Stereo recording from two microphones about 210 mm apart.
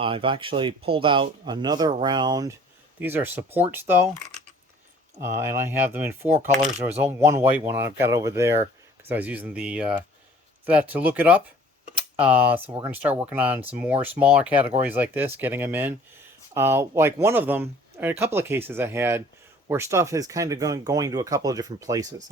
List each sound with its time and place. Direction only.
0.0 s speech: 25° right (ahead or behind); by 3.9 s 10° right (ahead or behind)
5.2 s speech: 10° right (ahead or behind)